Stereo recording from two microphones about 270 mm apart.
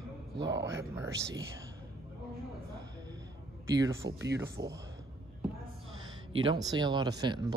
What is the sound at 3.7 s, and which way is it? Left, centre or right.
Speech, centre.